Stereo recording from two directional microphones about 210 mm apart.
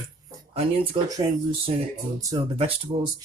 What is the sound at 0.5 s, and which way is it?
Speech, 20° right (ahead or behind).